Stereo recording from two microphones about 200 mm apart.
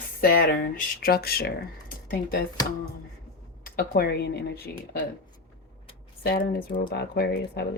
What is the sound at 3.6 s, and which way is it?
Speech, 50° left (ahead or behind).